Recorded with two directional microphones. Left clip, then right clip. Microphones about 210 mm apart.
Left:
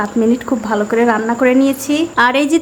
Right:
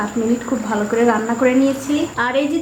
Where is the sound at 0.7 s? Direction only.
25° left (ahead or behind).